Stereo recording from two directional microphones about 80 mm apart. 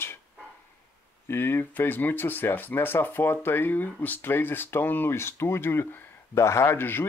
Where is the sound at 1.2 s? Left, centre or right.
Left.